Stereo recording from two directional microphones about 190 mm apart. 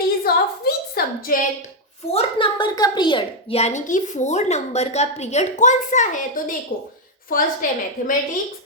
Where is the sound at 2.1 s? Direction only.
25° left (ahead or behind).